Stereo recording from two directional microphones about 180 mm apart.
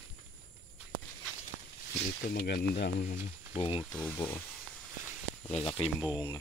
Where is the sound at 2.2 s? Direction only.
55° left (ahead or behind).